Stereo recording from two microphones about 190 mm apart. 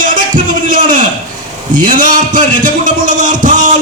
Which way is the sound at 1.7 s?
45° right (ahead or behind).